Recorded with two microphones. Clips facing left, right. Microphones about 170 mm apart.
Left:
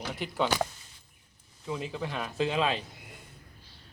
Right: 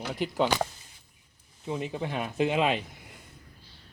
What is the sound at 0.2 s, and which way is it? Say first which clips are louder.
Speech: right 3 dB; 15° right (ahead or behind).